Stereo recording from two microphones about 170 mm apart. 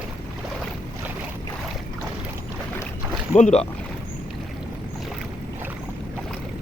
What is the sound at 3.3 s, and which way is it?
Speech, 45° left (ahead or behind).